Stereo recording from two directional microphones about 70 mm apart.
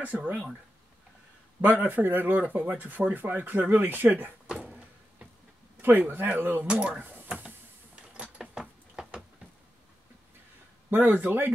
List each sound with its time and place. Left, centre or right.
0.0 s speech: right
1.6 s speech: right
5.8 s speech: right
7.3 s a sound: centre
10.9 s speech: right